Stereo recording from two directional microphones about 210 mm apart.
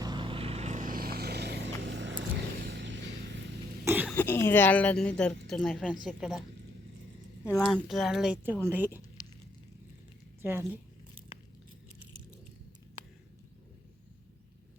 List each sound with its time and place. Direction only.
0.0 s vehicle: 20° right (ahead or behind); by 3.4 s 60° right (ahead or behind)
3.8 s throat clearing: 10° right (ahead or behind)
4.1 s a woman's voice: 10° left (ahead or behind)
7.9 s a woman's voice: centre (ahead or behind)
9.2 s a sound: 15° left (ahead or behind)
10.4 s speech: 10° right (ahead or behind)